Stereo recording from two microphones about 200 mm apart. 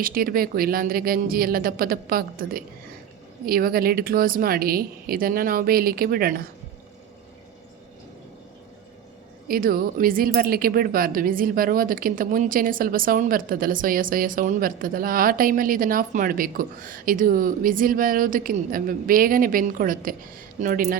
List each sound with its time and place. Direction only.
0.0 s speech: 45° right (ahead or behind)
9.5 s speech: 45° right (ahead or behind)